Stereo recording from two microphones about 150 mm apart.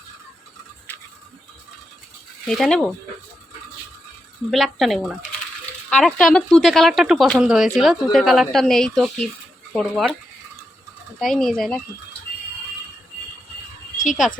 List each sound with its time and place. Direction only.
2.5 s speech: 5° left (ahead or behind)
4.5 s speech: centre (ahead or behind)
11.2 s speech: centre (ahead or behind)
13.9 s music: 60° left (ahead or behind)